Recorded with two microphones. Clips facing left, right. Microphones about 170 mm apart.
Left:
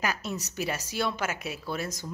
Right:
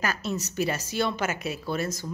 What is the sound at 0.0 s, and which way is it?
A woman's voice, 15° left (ahead or behind).